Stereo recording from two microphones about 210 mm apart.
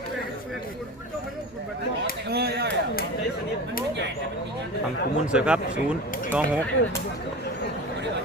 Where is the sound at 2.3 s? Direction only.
50° right (ahead or behind).